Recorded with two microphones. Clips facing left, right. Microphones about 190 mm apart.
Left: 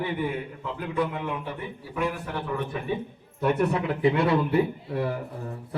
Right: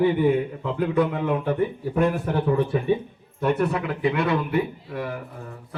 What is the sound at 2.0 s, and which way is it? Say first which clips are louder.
Speech: right 7 dB; 45° right (ahead or behind).